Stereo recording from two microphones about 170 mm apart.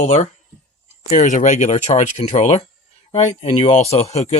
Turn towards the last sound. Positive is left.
turn(degrees=40)  # may be behind; listen again after turning